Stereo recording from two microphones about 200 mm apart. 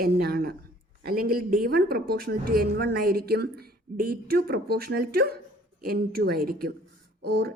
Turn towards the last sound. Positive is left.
turn(degrees=-50)  # may be behind; listen again after turning